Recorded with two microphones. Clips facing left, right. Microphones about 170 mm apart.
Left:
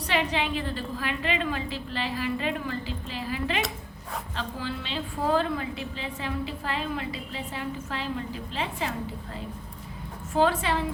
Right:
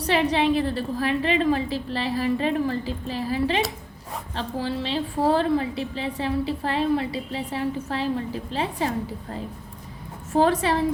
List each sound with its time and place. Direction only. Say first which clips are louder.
0.0 s a woman's voice: right 6 dB; 40° right (ahead or behind)
10.3 s a woman's voice: right 4 dB; 40° right (ahead or behind)